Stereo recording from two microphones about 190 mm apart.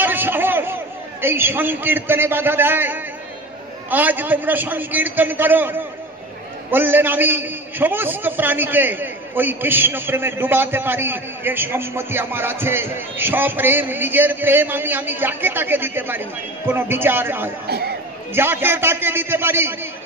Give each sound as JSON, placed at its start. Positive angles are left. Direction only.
{"t": 0.0, "sound": "a sound", "side_deg": -10}
{"t": 1.2, "sound": "a man's voice", "side_deg": -10}
{"t": 17.6, "sound": "speech", "side_deg": -55}
{"t": 18.3, "sound": "a man's voice", "side_deg": -10}